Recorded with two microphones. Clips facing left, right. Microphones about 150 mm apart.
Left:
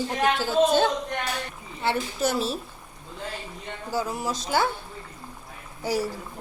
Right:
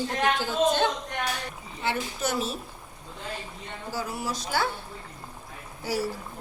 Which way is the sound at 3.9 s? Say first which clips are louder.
Left 4 dB; 20° left (ahead or behind).